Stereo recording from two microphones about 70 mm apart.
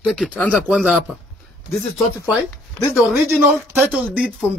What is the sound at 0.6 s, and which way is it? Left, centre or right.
Speech, centre.